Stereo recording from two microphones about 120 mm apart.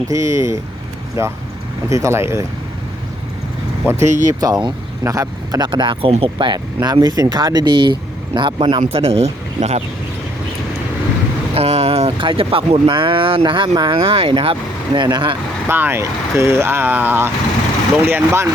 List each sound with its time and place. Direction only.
0.1 s speech: 25° right (ahead or behind)
3.9 s speech: 20° right (ahead or behind)
4.3 s speech: 30° right (ahead or behind)
6.7 s speech: 35° right (ahead or behind); by 9.2 s 55° right (ahead or behind)
9.6 s speech: 65° right (ahead or behind)
11.5 s speech: 60° right (ahead or behind); by 15.4 s 40° right (ahead or behind)
15.6 s speech: 20° right (ahead or behind)